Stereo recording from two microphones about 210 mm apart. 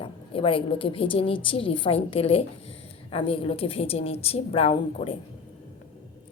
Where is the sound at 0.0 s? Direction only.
25° left (ahead or behind).